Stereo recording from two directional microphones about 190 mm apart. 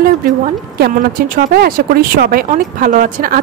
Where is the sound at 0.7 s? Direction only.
55° right (ahead or behind).